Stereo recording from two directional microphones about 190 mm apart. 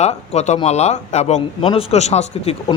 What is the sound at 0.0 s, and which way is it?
Speech, 35° left (ahead or behind).